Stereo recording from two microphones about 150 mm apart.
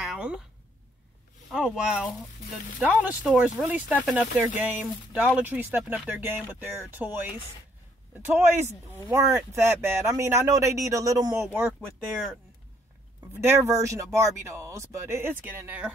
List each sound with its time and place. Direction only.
0.0 s a sound: 5° right (ahead or behind)
1.5 s speech: 5° right (ahead or behind); by 11.4 s 25° right (ahead or behind)
13.3 s speech: 15° right (ahead or behind)